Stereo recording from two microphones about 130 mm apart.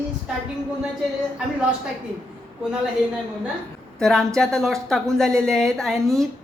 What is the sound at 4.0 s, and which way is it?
A woman's voice, 5° left (ahead or behind).